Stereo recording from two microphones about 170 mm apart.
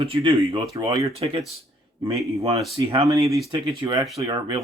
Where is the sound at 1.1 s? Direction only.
35° right (ahead or behind).